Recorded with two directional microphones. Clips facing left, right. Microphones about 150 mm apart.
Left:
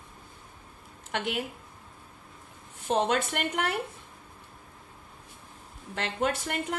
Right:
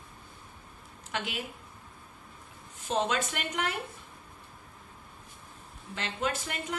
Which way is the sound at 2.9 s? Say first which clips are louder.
Left 3 dB; 60° left (ahead or behind).